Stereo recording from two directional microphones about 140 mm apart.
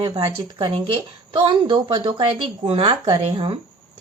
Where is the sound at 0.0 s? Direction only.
35° right (ahead or behind).